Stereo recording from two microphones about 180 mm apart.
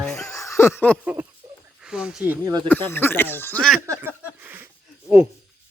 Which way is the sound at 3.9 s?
10° right (ahead or behind).